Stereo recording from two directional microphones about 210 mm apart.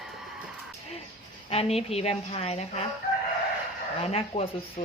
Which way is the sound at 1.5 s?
30° left (ahead or behind).